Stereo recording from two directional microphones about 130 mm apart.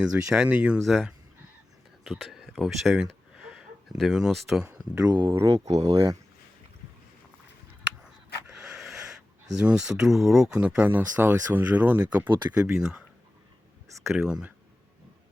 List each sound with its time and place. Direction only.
0.0 s speech: 5° right (ahead or behind)
5.5 s speech: 50° right (ahead or behind)
8.7 s speech: 5° right (ahead or behind)
14.1 s speech: 5° right (ahead or behind)